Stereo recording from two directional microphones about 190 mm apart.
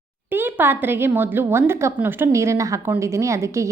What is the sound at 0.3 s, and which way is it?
A woman's voice, 10° right (ahead or behind).